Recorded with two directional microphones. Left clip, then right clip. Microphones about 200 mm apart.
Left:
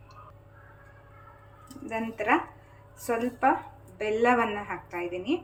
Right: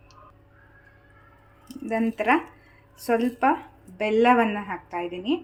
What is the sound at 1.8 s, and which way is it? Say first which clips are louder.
A woman's voice: right 5 dB; 40° right (ahead or behind).